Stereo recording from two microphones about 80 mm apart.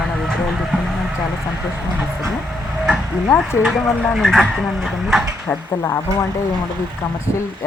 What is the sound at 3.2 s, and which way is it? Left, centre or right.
Speech, left.